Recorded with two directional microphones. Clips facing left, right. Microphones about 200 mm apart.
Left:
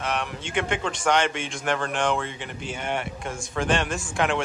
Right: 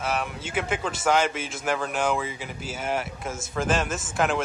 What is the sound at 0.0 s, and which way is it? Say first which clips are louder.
A man's voice: even; 5° right (ahead or behind).